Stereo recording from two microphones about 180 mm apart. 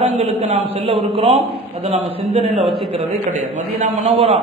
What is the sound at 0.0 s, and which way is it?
Speech, 35° right (ahead or behind).